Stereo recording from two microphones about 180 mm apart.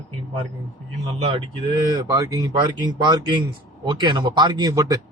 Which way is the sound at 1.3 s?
25° right (ahead or behind).